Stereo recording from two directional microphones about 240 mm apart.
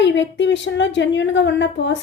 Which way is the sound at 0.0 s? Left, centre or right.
Left.